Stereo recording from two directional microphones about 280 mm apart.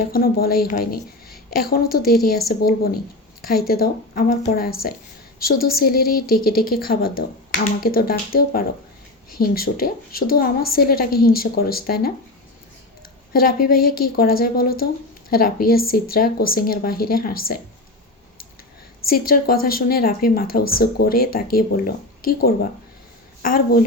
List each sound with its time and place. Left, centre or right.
0.0 s speech: left
5.5 s speech: centre
5.8 s speech: left
13.3 s speech: left
19.0 s a woman's voice: left